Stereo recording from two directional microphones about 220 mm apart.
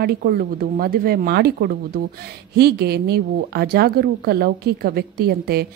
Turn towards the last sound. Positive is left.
turn(degrees=-45)  # may be behind; listen again after turning